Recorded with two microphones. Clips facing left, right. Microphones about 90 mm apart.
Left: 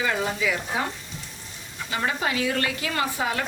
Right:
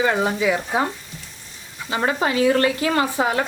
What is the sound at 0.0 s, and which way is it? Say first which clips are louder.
Speech: right 6 dB; 30° right (ahead or behind).